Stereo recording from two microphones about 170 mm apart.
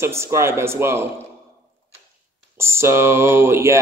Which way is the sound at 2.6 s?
15° right (ahead or behind).